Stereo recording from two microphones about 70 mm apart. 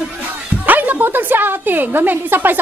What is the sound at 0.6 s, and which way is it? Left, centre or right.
A woman's voice, right.